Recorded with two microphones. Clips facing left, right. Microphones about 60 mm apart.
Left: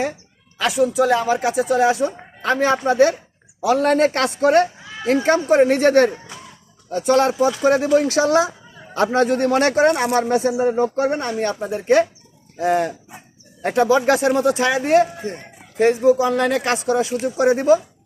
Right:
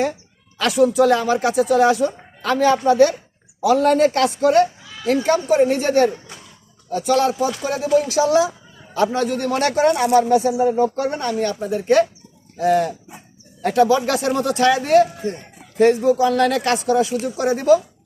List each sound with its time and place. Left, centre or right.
0.6 s a man's voice: centre; by 4.6 s left
4.8 s speech: left
7.0 s a man's voice: left
10.9 s a man's voice: left